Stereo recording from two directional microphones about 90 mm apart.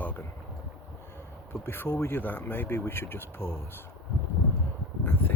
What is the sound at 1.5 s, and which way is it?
Speech, 25° left (ahead or behind).